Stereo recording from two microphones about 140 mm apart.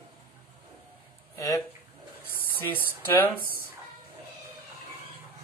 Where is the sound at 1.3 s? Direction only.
20° left (ahead or behind).